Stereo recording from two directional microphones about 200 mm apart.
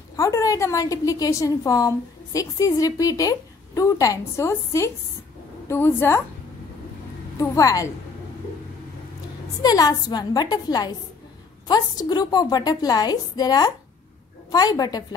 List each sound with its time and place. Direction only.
0.1 s a woman's voice: 15° left (ahead or behind)
7.3 s a woman's voice: 15° left (ahead or behind)
9.6 s a woman's voice: 20° left (ahead or behind)